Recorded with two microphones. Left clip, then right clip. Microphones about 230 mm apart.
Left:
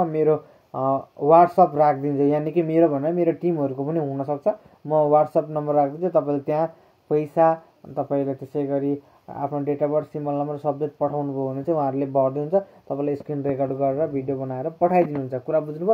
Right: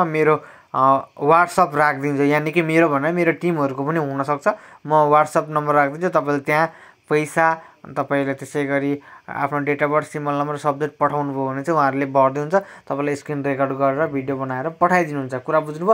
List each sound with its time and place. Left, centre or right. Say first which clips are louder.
0.0 s speech: right 3 dB; right